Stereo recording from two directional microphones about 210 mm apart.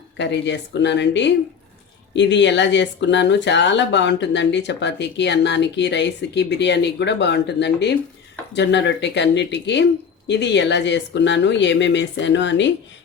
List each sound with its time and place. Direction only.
0.2 s speech: 55° left (ahead or behind)